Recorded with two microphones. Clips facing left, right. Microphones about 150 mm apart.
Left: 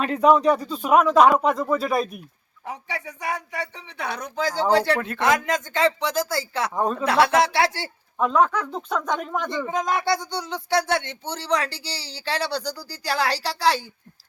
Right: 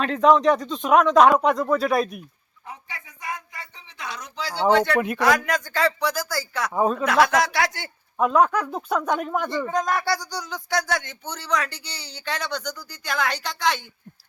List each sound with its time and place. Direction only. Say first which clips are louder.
0.0 s speech: even; 10° left (ahead or behind)
2.6 s speech: left 7 dB; 75° left (ahead or behind); by 4.6 s 45° left (ahead or behind)
4.7 s speech: right 1 dB; 35° left (ahead or behind)
4.9 s speech: right 5 dB; 15° right (ahead or behind)
5.5 s speech: left 1 dB; 20° left (ahead or behind)
6.7 s speech: right 4 dB; 5° right (ahead or behind)
7.0 s speech: left 3 dB; 30° left (ahead or behind)
8.2 s speech: right 1 dB; 5° right (ahead or behind)
9.6 s speech: even; 20° left (ahead or behind)